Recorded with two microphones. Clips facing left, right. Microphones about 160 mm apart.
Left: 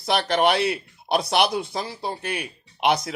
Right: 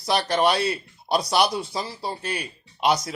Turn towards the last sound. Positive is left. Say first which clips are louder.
# left 1 dB
turn(degrees=55)  # may be behind; listen again after turning